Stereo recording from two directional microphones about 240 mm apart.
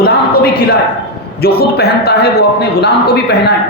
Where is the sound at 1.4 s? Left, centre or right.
Left.